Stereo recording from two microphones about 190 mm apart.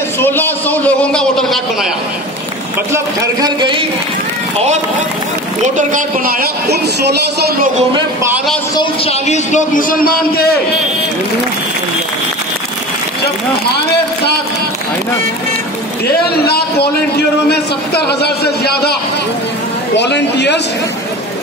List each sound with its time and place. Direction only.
0.2 s a man's voice: 10° left (ahead or behind)
2.9 s speech: 20° right (ahead or behind)
5.8 s speech: 45° right (ahead or behind)
8.7 s a man's voice: 30° left (ahead or behind); by 10.5 s 50° left (ahead or behind)
16.2 s a man's voice: 55° left (ahead or behind)
20.0 s a man's voice: 65° left (ahead or behind)